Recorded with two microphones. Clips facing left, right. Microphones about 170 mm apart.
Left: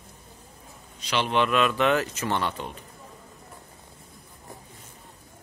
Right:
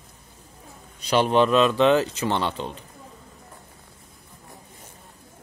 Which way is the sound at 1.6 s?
25° right (ahead or behind).